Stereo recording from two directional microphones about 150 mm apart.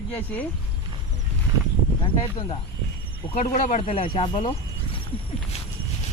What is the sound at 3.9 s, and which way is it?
Speech, 35° left (ahead or behind).